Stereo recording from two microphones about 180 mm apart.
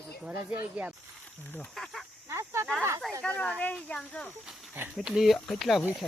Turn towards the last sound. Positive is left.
turn(degrees=-5)  # may be behind; listen again after turning